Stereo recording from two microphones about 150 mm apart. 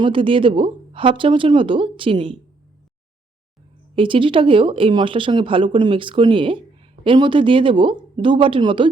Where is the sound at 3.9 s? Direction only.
35° right (ahead or behind).